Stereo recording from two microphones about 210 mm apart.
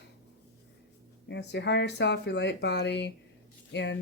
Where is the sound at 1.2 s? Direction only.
55° left (ahead or behind).